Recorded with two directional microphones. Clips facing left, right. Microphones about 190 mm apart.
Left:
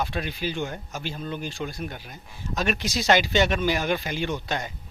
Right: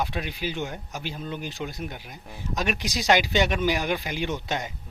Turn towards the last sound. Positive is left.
turn(degrees=-20)  # may be behind; listen again after turning